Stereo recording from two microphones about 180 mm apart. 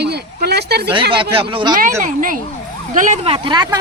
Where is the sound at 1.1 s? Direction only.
30° right (ahead or behind).